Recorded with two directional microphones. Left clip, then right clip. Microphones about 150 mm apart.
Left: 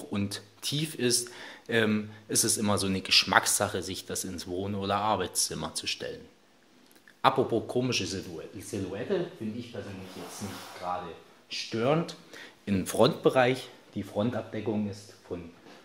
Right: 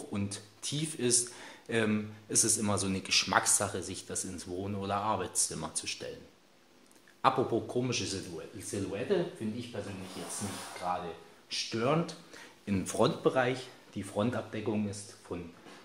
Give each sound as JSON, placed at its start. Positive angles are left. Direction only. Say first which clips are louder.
{"t": 0.1, "sound": "speech", "louder": "left 7 dB", "side_deg": 25}
{"t": 7.2, "sound": "a man's voice", "louder": "left 3 dB", "side_deg": 30}
{"t": 9.8, "sound": "a man's voice", "louder": "even", "side_deg": 20}
{"t": 15.3, "sound": "speech", "louder": "left 2 dB", "side_deg": 15}